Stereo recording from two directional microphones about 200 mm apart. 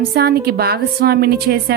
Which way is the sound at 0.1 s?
55° right (ahead or behind).